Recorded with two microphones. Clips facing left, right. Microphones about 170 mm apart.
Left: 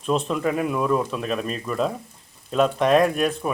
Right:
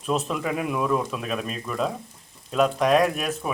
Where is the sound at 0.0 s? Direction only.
5° right (ahead or behind).